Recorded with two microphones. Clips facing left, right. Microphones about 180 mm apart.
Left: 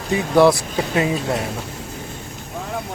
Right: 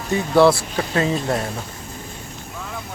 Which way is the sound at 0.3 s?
15° left (ahead or behind).